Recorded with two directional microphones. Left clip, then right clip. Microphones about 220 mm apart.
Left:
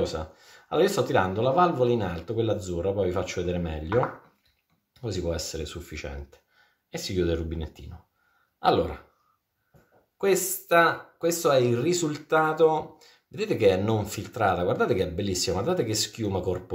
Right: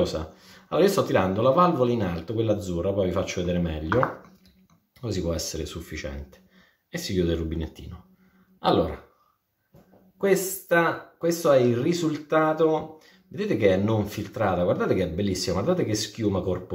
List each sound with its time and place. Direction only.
0.0 s speech: 20° left (ahead or behind)
5.0 s speech: 20° left (ahead or behind)
8.5 s throat clearing: 15° left (ahead or behind)
10.2 s speech: 20° left (ahead or behind)